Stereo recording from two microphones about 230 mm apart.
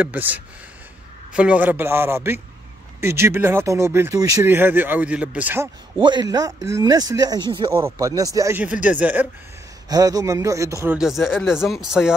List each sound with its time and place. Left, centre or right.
0.0 s speech: centre
5.9 s speech: centre
11.0 s speech: centre